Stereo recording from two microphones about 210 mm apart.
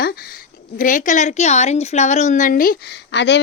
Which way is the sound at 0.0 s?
45° left (ahead or behind).